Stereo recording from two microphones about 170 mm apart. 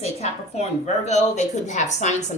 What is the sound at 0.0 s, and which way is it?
A woman's voice, 40° left (ahead or behind).